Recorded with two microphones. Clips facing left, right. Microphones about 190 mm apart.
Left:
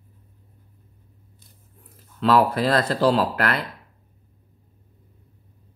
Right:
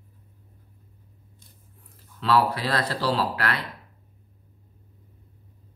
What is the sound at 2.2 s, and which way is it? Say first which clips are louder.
Speech: left 4 dB; 50° left (ahead or behind).